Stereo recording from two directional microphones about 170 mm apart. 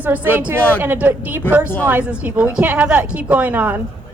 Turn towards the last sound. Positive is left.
turn(degrees=-10)  # may be behind; listen again after turning